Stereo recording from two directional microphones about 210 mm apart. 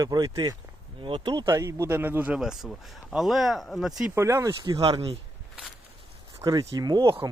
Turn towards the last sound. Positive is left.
turn(degrees=-20)  # may be behind; listen again after turning